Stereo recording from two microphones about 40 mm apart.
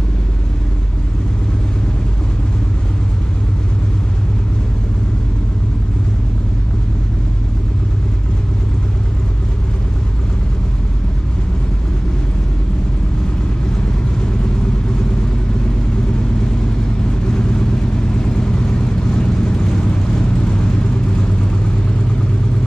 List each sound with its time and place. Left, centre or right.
17.3 s vehicle: centre